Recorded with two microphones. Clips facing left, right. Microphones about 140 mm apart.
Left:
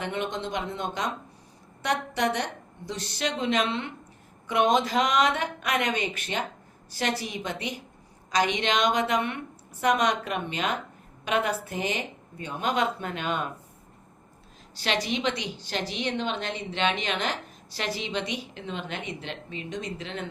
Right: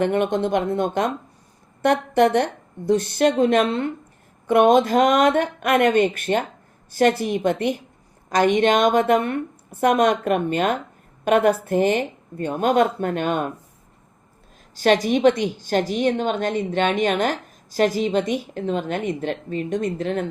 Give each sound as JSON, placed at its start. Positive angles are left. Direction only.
{"t": 0.0, "sound": "a woman's voice", "side_deg": -50}
{"t": 14.8, "sound": "a woman's voice", "side_deg": -45}